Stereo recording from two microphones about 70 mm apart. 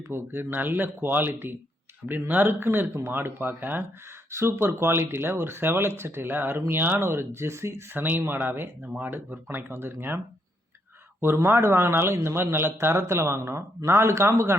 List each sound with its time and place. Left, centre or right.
0.1 s a man's voice: right
4.3 s a man's voice: right
11.4 s a man's voice: right